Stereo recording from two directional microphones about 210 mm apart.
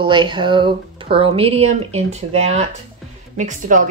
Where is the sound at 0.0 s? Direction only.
20° right (ahead or behind).